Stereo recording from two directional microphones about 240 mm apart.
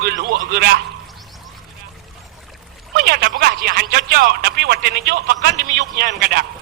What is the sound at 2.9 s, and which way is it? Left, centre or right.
A man's voice, right.